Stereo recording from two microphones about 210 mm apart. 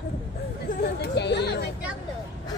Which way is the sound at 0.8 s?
50° left (ahead or behind).